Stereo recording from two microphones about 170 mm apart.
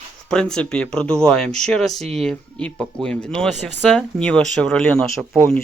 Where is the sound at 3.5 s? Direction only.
40° right (ahead or behind).